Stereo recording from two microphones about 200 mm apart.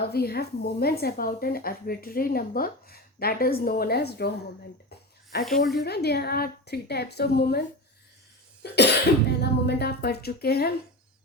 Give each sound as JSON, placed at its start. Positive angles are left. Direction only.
{"t": 0.1, "sound": "speech", "side_deg": 55}
{"t": 5.4, "sound": "speech", "side_deg": 0}
{"t": 5.7, "sound": "speech", "side_deg": 55}
{"t": 8.6, "sound": "cough", "side_deg": 60}
{"t": 9.4, "sound": "speech", "side_deg": 55}